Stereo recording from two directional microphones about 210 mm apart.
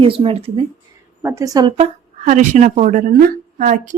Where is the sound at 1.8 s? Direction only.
35° right (ahead or behind).